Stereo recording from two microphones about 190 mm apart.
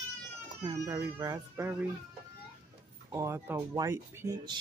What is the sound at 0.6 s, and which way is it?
Speech, 20° right (ahead or behind).